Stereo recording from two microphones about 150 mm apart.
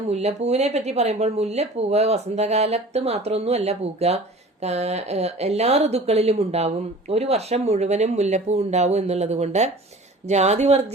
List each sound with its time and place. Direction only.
0.1 s a woman's voice: 45° right (ahead or behind)